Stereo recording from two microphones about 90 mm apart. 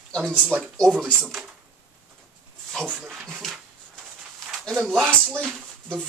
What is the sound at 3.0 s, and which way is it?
Dog, 10° right (ahead or behind).